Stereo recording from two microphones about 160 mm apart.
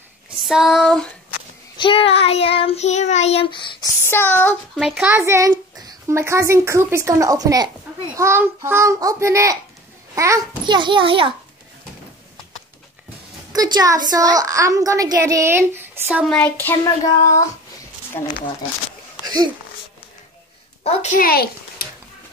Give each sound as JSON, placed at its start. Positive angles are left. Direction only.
{"t": 0.4, "sound": "female singing", "side_deg": 0}
{"t": 1.8, "sound": "child singing", "side_deg": 35}
{"t": 4.0, "sound": "child singing", "side_deg": 15}
{"t": 4.7, "sound": "female singing", "side_deg": 0}
{"t": 5.1, "sound": "a child's voice", "side_deg": -15}
{"t": 10.7, "sound": "a child's voice", "side_deg": -30}
{"t": 13.5, "sound": "a woman's voice", "side_deg": -25}
{"t": 16.3, "sound": "a sound", "side_deg": 10}
{"t": 18.2, "sound": "speech", "side_deg": 30}
{"t": 19.2, "sound": "a sound", "side_deg": -25}
{"t": 20.8, "sound": "a child's voice", "side_deg": 45}
{"t": 21.2, "sound": "a child's voice", "side_deg": 70}